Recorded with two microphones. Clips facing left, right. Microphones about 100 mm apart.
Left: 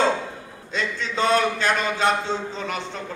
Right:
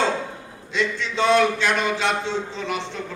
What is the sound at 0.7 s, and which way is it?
A man's voice, 40° left (ahead or behind).